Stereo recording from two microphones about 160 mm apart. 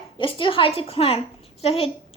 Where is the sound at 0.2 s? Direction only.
30° left (ahead or behind).